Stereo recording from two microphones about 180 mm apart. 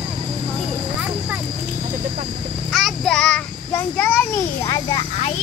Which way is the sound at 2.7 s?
Centre (ahead or behind).